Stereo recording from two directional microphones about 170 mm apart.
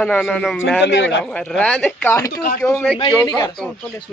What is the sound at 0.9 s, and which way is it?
Speech, 90° left.